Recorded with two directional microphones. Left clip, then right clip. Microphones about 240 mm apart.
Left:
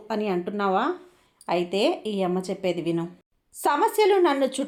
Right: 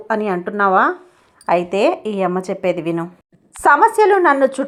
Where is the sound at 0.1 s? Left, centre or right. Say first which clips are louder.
Right 8 dB; centre.